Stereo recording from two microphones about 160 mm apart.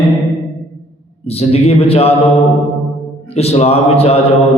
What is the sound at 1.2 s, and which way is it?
Speech, 40° left (ahead or behind).